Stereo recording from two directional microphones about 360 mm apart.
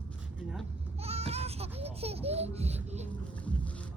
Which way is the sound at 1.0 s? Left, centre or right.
Centre.